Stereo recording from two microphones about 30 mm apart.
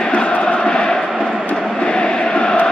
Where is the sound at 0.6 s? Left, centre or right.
Left.